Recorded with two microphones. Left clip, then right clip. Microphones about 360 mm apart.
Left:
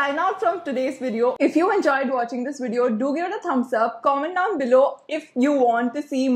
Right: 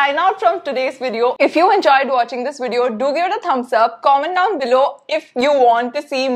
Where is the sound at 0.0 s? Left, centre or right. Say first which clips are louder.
Right 7 dB; right.